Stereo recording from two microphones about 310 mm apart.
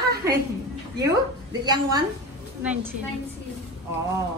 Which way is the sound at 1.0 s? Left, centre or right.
Centre.